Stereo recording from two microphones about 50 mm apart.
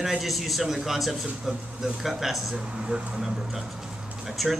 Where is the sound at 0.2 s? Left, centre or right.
Centre.